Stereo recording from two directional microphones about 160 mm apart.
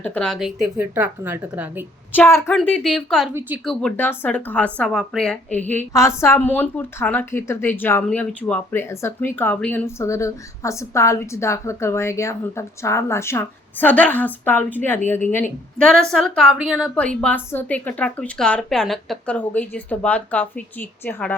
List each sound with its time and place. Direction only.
0.0 s a woman's voice: 5° left (ahead or behind); by 1.8 s 10° right (ahead or behind)
2.1 s a woman's voice: 10° left (ahead or behind); by 16.9 s 5° right (ahead or behind)
16.9 s speech: 5° left (ahead or behind)